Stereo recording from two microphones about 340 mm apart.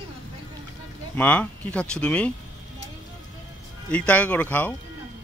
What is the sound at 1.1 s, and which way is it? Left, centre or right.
Speech, centre.